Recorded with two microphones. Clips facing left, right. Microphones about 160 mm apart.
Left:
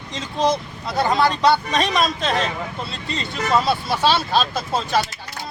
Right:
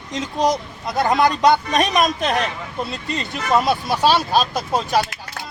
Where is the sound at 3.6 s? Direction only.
15° right (ahead or behind).